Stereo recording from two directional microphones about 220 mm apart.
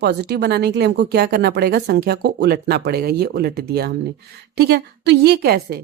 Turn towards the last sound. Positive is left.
turn(degrees=-45)  # may be behind; listen again after turning